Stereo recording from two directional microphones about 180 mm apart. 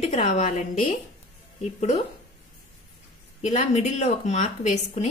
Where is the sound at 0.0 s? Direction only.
40° left (ahead or behind).